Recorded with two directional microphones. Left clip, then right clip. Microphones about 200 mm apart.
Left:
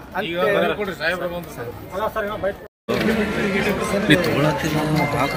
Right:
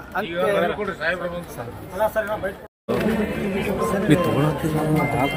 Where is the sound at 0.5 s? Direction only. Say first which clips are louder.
Left 2 dB; 60° left (ahead or behind).